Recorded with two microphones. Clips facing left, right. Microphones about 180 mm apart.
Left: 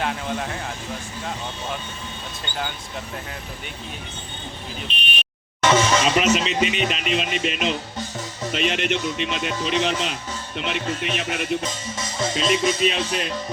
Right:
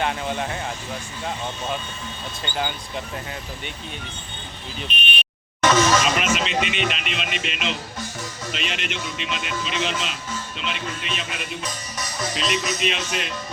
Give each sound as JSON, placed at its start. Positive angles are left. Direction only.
{"t": 0.0, "sound": "speech", "side_deg": 0}
{"t": 2.4, "sound": "speech", "side_deg": -5}
{"t": 4.9, "sound": "speech", "side_deg": 35}
{"t": 5.6, "sound": "music", "side_deg": 25}
{"t": 6.3, "sound": "speech", "side_deg": 35}
{"t": 11.6, "sound": "music", "side_deg": 25}